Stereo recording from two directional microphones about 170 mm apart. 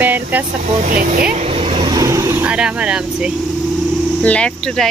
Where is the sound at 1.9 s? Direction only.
20° right (ahead or behind).